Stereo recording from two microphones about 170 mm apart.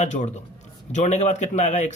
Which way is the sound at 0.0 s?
45° left (ahead or behind).